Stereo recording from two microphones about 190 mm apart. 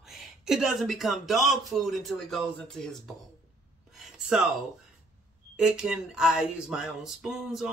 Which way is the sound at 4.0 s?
5° right (ahead or behind).